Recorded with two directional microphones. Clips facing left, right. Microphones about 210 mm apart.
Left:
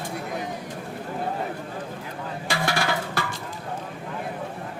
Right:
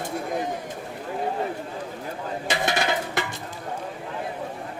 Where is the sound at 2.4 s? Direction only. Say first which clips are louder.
Right 1 dB; 20° right (ahead or behind).